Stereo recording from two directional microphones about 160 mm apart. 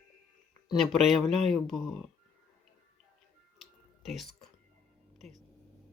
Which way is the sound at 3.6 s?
Centre (ahead or behind).